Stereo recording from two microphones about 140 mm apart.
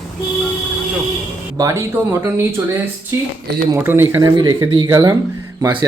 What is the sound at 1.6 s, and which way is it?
A man's voice, 25° right (ahead or behind).